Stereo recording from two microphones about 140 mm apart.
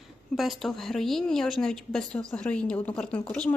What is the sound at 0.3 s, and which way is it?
A woman's voice, centre (ahead or behind).